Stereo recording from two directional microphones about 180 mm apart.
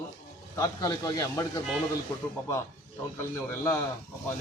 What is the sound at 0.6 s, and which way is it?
Speech, 20° left (ahead or behind).